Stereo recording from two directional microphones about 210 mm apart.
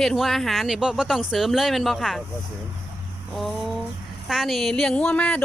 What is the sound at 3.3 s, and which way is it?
Speech, centre (ahead or behind).